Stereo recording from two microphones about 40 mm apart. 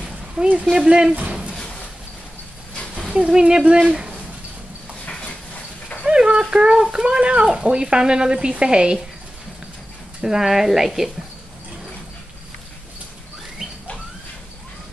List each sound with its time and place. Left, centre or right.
0.4 s speech: right
3.2 s speech: right
6.0 s a sound: right
6.5 s speech: centre
10.2 s a woman's voice: centre